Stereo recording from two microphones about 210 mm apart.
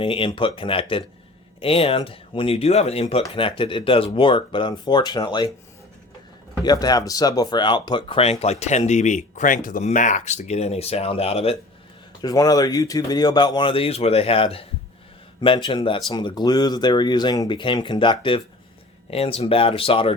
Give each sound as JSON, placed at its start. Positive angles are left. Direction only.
{"t": 0.0, "sound": "speech", "side_deg": 25}
{"t": 6.7, "sound": "speech", "side_deg": 20}
{"t": 12.2, "sound": "speech", "side_deg": 15}